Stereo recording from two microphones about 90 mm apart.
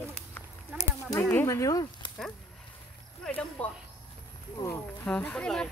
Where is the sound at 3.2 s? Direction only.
15° left (ahead or behind).